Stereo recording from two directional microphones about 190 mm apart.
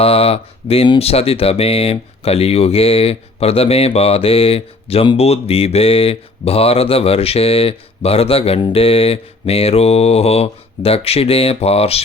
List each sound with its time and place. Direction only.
0.0 s speech: 30° left (ahead or behind)